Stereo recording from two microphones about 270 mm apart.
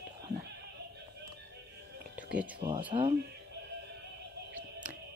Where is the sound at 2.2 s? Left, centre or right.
Centre.